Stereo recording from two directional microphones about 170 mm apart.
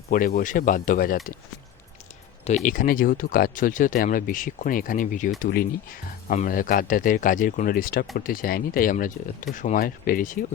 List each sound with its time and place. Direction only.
0.1 s speech: 55° left (ahead or behind)
2.6 s speech: 55° left (ahead or behind)